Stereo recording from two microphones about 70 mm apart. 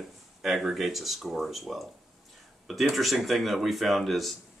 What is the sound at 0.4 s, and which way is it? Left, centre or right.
Speech, centre.